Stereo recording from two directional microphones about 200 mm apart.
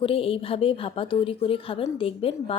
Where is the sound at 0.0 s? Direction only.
30° left (ahead or behind).